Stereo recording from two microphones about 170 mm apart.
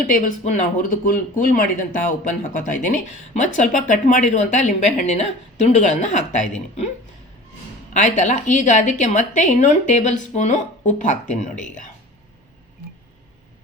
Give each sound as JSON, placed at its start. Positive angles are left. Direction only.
{"t": 0.1, "sound": "a woman's voice", "side_deg": 50}
{"t": 7.9, "sound": "a woman's voice", "side_deg": 45}